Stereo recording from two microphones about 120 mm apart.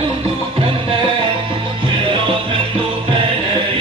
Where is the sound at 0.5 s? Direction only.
50° right (ahead or behind).